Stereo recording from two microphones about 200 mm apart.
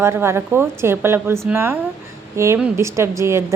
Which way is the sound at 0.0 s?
10° right (ahead or behind).